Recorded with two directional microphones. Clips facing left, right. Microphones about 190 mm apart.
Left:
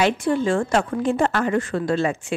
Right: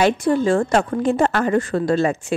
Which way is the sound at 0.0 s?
40° right (ahead or behind).